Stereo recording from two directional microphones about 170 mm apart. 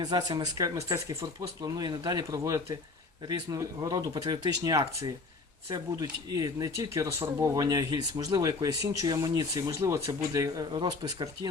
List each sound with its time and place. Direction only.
0.0 s speech: 20° right (ahead or behind)